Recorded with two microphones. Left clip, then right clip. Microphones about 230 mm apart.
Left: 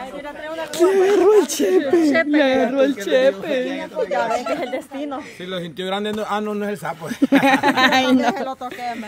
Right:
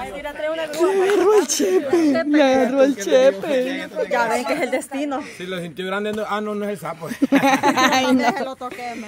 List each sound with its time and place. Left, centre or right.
0.7 s a sound: centre
2.3 s speech: centre
4.1 s speech: right
5.9 s a man's voice: centre